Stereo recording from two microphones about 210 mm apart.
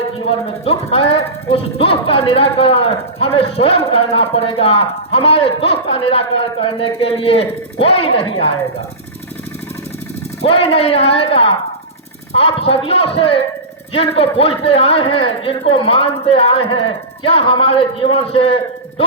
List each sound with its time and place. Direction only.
0.3 s speech: 30° left (ahead or behind)
10.4 s speech: 25° left (ahead or behind)